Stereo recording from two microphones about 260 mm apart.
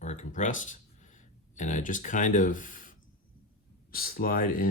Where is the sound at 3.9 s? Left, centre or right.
Left.